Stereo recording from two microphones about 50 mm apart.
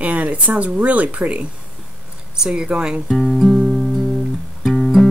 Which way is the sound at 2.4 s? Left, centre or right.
Centre.